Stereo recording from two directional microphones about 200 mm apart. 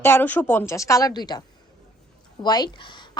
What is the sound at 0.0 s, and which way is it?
A woman's voice, 10° left (ahead or behind).